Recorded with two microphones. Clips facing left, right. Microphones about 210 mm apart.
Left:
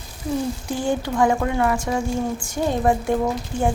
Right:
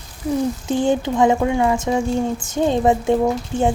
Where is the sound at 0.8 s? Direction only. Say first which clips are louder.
Right 4 dB; 20° right (ahead or behind).